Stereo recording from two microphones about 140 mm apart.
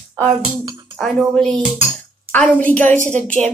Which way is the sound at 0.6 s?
25° right (ahead or behind).